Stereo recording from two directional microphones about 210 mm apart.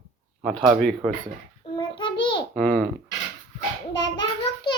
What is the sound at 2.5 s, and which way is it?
Speech, 5° left (ahead or behind).